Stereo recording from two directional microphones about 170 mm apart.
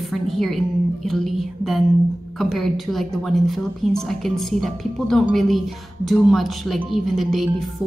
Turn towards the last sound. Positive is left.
turn(degrees=0)  # may be behind; listen again after turning